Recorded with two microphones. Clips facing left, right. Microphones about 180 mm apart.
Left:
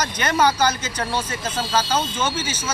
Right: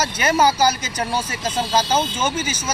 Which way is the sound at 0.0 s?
10° right (ahead or behind).